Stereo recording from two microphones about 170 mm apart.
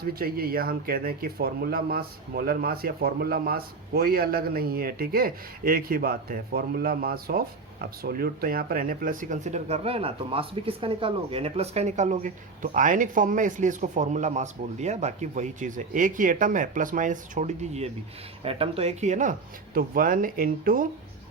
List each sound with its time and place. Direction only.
0.0 s speech: 60° right (ahead or behind)